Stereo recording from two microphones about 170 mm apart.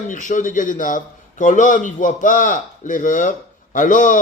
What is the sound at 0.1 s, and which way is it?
Speech, 50° left (ahead or behind).